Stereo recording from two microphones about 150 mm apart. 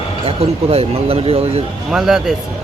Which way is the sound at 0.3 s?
40° right (ahead or behind).